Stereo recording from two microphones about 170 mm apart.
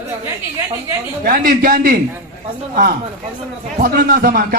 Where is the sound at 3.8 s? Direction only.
60° right (ahead or behind).